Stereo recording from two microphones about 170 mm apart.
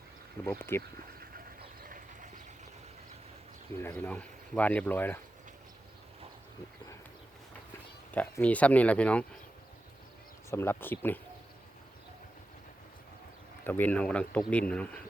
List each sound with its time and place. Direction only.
0.4 s speech: 15° left (ahead or behind)
1.8 s a sound: 50° right (ahead or behind)
3.8 s speech: 10° left (ahead or behind)
8.1 s speech: 10° left (ahead or behind)
10.5 s speech: 15° left (ahead or behind)
13.7 s speech: 10° left (ahead or behind)